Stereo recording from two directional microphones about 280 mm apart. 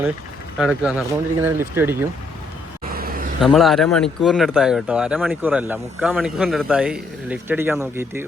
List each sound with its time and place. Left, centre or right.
0.6 s speech: centre
2.8 s a sound: right
3.4 s speech: centre